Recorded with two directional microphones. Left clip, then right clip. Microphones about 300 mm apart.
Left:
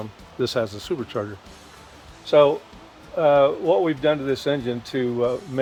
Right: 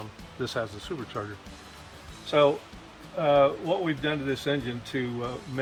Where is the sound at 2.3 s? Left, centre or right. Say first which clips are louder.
Left 6 dB; left.